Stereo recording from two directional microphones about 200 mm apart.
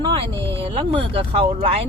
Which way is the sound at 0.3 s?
10° left (ahead or behind).